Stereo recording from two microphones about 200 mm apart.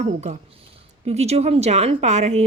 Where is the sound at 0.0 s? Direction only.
35° right (ahead or behind).